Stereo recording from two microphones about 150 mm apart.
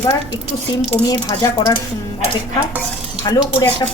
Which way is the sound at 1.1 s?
30° left (ahead or behind).